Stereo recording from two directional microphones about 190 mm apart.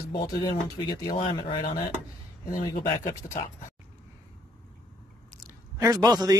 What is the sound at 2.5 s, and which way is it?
Speech, 45° left (ahead or behind).